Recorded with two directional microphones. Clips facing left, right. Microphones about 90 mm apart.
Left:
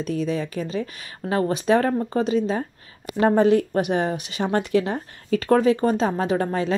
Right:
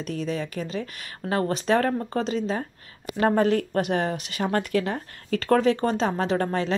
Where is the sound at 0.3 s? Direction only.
25° left (ahead or behind).